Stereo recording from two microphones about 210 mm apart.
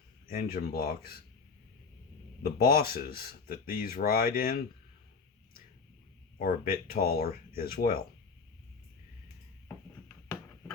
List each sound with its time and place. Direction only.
0.3 s speech: 45° left (ahead or behind)
2.6 s speech: 45° left (ahead or behind)
6.4 s speech: 45° left (ahead or behind)